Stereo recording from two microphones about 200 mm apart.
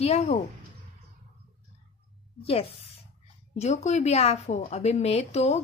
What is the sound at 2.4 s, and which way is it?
A woman's voice, 30° left (ahead or behind).